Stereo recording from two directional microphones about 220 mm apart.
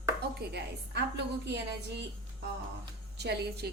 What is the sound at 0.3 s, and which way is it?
A woman's voice, 50° right (ahead or behind).